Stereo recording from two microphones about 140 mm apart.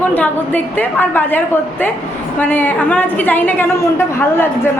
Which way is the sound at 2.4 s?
15° left (ahead or behind).